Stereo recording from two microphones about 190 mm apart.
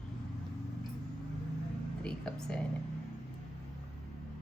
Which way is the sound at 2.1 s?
5° left (ahead or behind).